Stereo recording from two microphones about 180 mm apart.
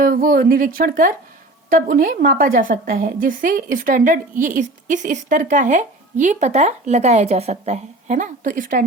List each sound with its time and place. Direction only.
0.0 s a woman's voice: 50° right (ahead or behind)